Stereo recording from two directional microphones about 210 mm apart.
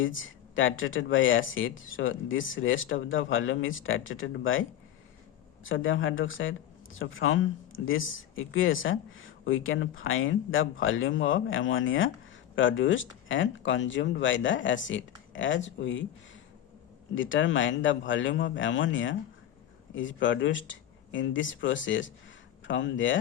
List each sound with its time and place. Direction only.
0.0 s speech: 65° left (ahead or behind)
5.6 s speech: 70° left (ahead or behind)
17.2 s speech: 65° left (ahead or behind)